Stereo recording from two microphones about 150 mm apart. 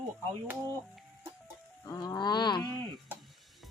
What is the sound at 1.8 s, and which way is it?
Speech, 20° left (ahead or behind).